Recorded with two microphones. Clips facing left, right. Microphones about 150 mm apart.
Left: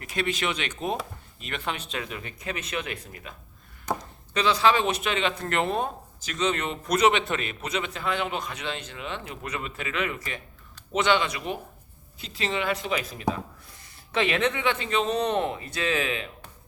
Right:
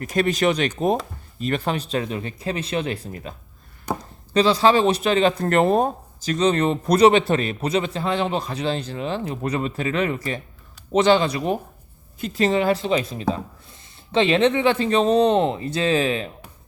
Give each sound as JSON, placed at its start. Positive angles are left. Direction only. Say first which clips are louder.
{"t": 0.0, "sound": "speech", "louder": "right 9 dB", "side_deg": -40}
{"t": 3.9, "sound": "chopping", "louder": "right 3 dB", "side_deg": -10}
{"t": 4.4, "sound": "speech", "louder": "right 6 dB", "side_deg": -35}